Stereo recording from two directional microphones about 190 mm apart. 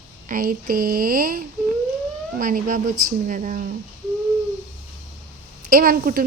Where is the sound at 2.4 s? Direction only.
45° right (ahead or behind).